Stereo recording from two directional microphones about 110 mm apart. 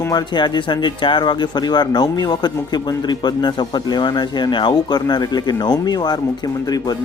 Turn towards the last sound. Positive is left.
turn(degrees=35)  # may be behind; listen again after turning